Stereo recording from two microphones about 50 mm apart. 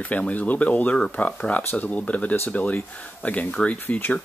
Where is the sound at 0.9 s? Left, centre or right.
Centre.